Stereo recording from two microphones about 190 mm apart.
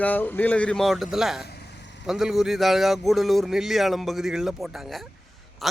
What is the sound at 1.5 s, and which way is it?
Vehicle, 60° left (ahead or behind).